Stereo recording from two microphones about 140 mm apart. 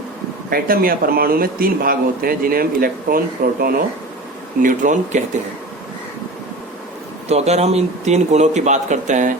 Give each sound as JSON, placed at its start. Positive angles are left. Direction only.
{"t": 0.5, "sound": "a man's voice", "side_deg": -90}
{"t": 4.6, "sound": "speech", "side_deg": -65}
{"t": 7.3, "sound": "a man's voice", "side_deg": -50}